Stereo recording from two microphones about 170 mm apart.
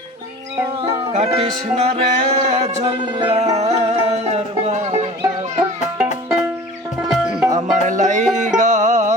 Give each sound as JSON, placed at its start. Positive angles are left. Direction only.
{"t": 0.8, "sound": "music", "side_deg": -35}
{"t": 7.0, "sound": "music", "side_deg": -5}
{"t": 7.5, "sound": "music", "side_deg": -45}